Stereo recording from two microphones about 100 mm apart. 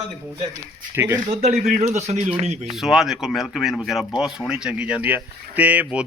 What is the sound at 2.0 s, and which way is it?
Speech, 90° right.